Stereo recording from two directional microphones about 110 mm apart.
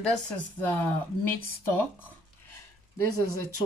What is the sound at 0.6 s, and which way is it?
Speech, 15° left (ahead or behind).